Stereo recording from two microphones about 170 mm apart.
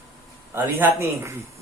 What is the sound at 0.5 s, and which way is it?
Speech, 15° right (ahead or behind).